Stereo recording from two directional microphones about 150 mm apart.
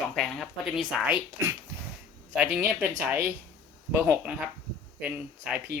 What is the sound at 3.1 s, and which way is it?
Speech, 15° right (ahead or behind).